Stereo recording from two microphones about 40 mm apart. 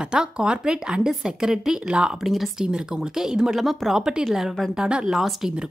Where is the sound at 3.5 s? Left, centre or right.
Centre.